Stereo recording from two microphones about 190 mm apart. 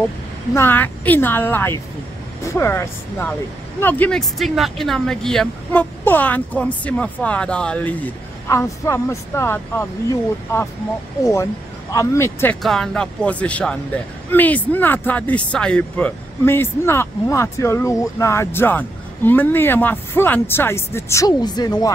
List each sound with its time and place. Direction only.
0.6 s speech: 10° left (ahead or behind)
11.9 s speech: 15° left (ahead or behind)